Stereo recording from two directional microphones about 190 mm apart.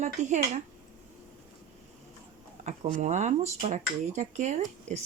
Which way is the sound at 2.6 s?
40° right (ahead or behind).